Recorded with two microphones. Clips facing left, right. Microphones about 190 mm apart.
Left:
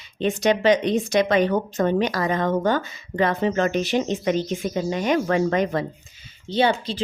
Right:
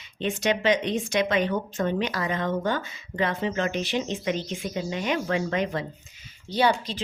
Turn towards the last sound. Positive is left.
turn(degrees=25)  # may be behind; listen again after turning